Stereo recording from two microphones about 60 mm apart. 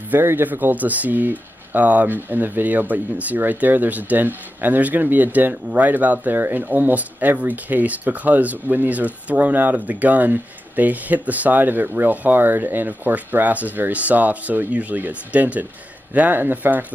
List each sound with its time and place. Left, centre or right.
0.1 s speech: right